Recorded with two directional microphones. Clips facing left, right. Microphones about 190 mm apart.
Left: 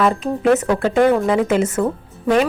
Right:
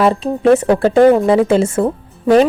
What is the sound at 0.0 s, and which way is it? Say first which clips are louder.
A woman's voice: right 4 dB; 30° right (ahead or behind).